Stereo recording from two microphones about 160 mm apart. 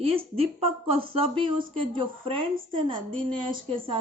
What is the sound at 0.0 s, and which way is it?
A woman's voice, 35° right (ahead or behind).